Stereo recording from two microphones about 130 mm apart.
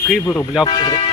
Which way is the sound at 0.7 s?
40° left (ahead or behind).